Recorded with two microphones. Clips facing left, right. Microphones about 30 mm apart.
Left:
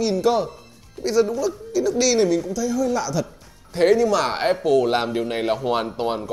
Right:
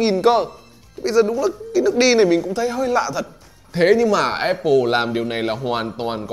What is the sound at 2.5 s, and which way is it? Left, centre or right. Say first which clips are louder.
Speech: right 2 dB; right.